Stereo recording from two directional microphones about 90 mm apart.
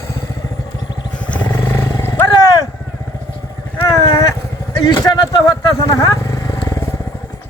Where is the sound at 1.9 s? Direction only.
25° left (ahead or behind).